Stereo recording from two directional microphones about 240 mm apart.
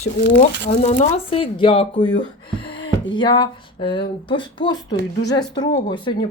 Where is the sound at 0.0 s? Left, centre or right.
Left.